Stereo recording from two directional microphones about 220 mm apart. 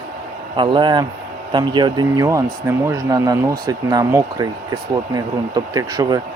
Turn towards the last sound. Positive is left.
turn(degrees=-20)  # may be behind; listen again after turning